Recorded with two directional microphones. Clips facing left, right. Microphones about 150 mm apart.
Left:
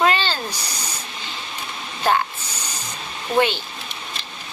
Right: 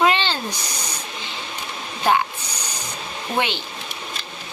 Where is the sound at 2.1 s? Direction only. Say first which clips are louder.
Right 1 dB; 15° right (ahead or behind).